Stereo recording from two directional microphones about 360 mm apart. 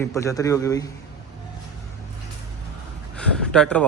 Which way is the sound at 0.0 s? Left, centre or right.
Centre.